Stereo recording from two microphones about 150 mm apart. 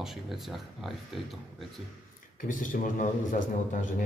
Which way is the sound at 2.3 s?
60° left (ahead or behind).